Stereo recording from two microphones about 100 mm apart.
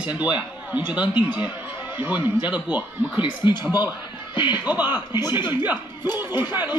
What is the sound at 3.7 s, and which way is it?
Chuckle, 45° left (ahead or behind).